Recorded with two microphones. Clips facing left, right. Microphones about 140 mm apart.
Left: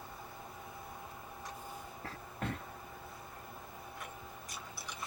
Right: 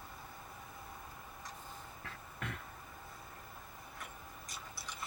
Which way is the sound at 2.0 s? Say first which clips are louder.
Left 6 dB; 35° left (ahead or behind).